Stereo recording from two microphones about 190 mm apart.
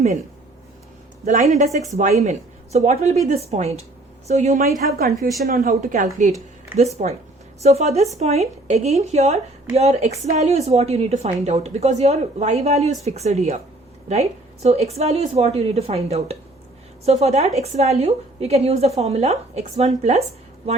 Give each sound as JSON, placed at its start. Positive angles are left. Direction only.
{"t": 1.2, "sound": "a woman's voice", "side_deg": -40}